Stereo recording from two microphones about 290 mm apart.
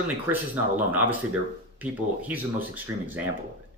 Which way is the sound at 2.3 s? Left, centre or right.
Centre.